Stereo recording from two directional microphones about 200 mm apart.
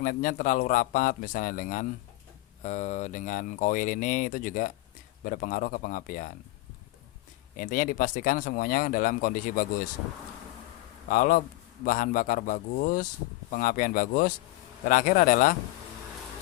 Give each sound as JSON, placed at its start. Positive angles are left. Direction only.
{"t": 0.0, "sound": "speech", "side_deg": 45}
{"t": 7.5, "sound": "speech", "side_deg": 40}
{"t": 11.1, "sound": "speech", "side_deg": 45}